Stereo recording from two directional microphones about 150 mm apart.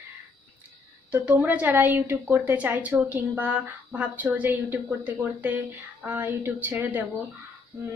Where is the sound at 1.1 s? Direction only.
10° right (ahead or behind).